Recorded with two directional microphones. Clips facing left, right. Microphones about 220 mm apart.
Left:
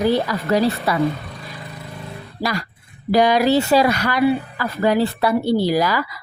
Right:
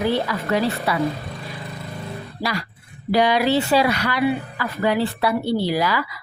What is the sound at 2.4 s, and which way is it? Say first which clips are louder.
A woman's voice: left 3 dB; 45° left (ahead or behind).